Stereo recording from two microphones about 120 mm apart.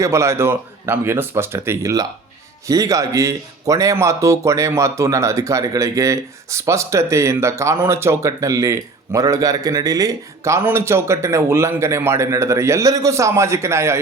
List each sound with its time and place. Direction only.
0.0 s speech: 25° right (ahead or behind)